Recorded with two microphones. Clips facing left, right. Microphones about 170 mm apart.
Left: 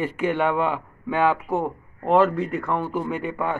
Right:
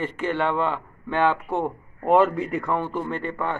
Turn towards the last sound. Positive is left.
turn(degrees=10)  # may be behind; listen again after turning